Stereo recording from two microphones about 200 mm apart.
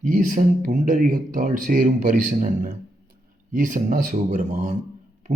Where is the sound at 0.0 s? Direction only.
45° right (ahead or behind).